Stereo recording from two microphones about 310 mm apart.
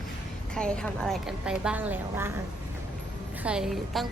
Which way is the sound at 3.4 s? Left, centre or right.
Centre.